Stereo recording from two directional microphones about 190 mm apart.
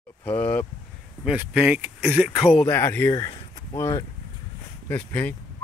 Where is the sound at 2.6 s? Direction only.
15° left (ahead or behind).